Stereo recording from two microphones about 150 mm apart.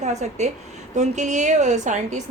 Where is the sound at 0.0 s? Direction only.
50° right (ahead or behind).